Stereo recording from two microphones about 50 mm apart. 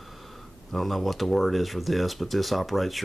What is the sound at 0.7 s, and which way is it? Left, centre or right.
Speech, centre.